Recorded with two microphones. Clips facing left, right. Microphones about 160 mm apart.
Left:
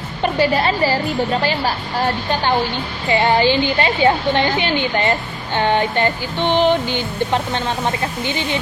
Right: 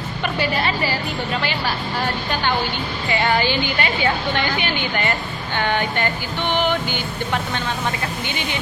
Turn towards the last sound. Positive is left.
turn(degrees=30)  # may be behind; listen again after turning